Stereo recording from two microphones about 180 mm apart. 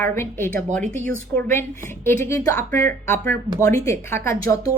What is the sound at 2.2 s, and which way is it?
A woman's voice, 15° left (ahead or behind).